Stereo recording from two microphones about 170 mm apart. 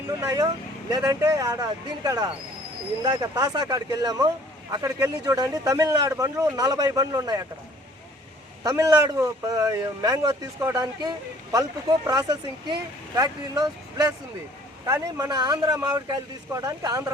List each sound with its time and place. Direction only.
0.1 s speech: 20° right (ahead or behind)
8.6 s speech: 20° right (ahead or behind)